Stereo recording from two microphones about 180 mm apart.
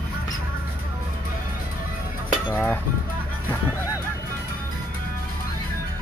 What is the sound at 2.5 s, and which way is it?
Music, 10° left (ahead or behind).